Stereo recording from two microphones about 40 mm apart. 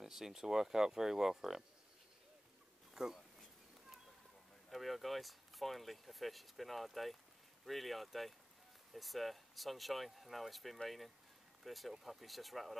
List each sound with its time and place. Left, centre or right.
0.0 s speech: centre
2.9 s a sound: centre
4.6 s speech: centre